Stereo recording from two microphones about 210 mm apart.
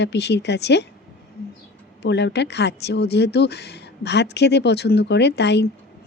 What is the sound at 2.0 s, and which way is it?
Speech, 55° left (ahead or behind).